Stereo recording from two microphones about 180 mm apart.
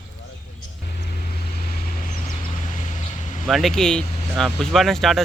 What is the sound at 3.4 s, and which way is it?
Speech, centre (ahead or behind).